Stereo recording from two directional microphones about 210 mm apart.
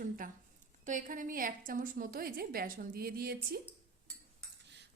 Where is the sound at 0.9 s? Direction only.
40° right (ahead or behind).